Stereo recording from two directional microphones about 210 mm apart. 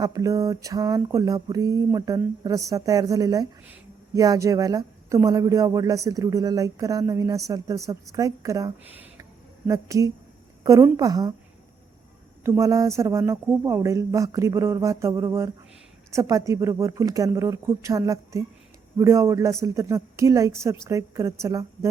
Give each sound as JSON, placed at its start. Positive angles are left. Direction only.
{"t": 0.0, "sound": "speech", "side_deg": -15}
{"t": 12.4, "sound": "speech", "side_deg": -15}